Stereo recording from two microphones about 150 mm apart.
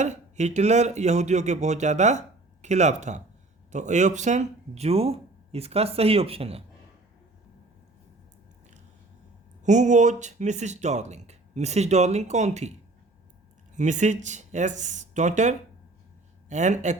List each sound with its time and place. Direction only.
0.0 s speech: 50° right (ahead or behind)
9.6 s speech: 55° right (ahead or behind)
13.7 s speech: 55° right (ahead or behind)